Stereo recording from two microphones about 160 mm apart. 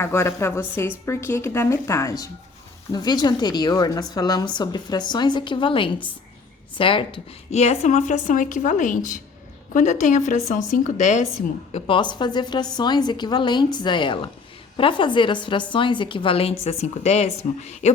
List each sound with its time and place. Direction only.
0.0 s a woman's voice: 15° left (ahead or behind); by 11.3 s 45° left (ahead or behind)
11.7 s a woman's voice: 30° left (ahead or behind)